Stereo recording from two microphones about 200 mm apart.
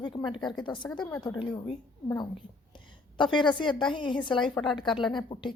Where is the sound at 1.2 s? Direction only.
25° left (ahead or behind).